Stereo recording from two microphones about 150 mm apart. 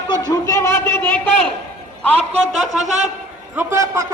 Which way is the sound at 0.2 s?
25° left (ahead or behind).